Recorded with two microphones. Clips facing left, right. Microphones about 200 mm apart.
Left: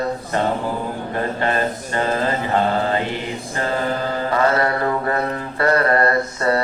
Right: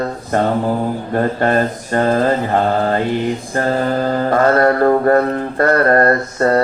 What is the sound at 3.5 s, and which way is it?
Mantra, 45° right (ahead or behind).